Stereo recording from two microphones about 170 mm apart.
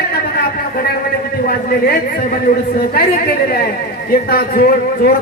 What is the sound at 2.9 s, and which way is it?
Speech, 65° left (ahead or behind).